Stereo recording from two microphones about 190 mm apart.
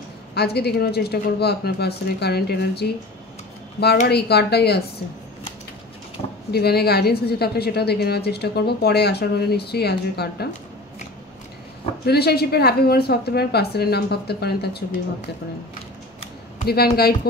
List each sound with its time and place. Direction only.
0.3 s a woman's voice: 60° left (ahead or behind)
4.1 s a woman's voice: 60° left (ahead or behind)
6.5 s a woman's voice: 55° left (ahead or behind)
12.1 s a woman's voice: 55° left (ahead or behind)
16.5 s a woman's voice: 55° left (ahead or behind)